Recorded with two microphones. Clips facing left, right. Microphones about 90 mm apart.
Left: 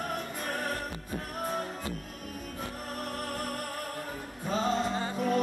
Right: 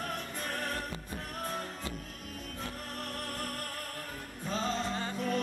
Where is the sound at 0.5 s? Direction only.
10° left (ahead or behind).